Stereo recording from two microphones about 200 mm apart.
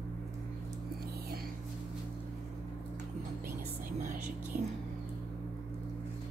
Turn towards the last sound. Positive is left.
turn(degrees=-45)  # may be behind; listen again after turning